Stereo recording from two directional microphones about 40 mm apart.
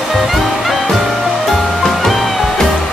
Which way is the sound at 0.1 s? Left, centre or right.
Centre.